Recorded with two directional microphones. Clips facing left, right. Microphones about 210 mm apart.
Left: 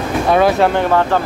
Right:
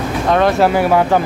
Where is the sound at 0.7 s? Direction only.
10° right (ahead or behind).